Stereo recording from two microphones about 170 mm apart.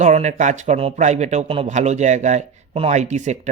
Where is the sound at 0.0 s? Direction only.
45° right (ahead or behind).